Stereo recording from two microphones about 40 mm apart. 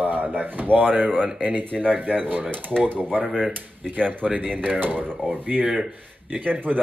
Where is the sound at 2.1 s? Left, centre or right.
Right.